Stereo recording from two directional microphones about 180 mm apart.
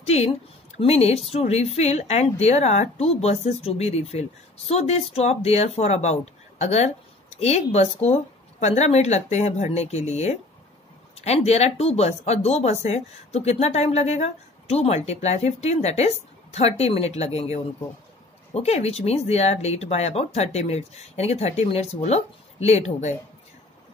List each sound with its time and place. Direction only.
0.0 s speech: 35° left (ahead or behind)